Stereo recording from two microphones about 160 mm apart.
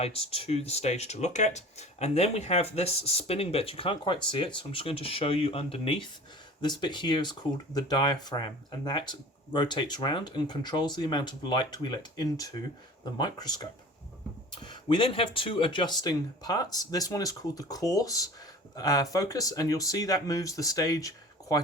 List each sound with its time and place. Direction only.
0.0 s speech: 40° left (ahead or behind); by 21.6 s 20° left (ahead or behind)